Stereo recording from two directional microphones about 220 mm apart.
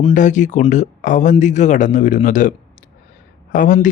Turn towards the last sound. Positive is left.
turn(degrees=35)  # may be behind; listen again after turning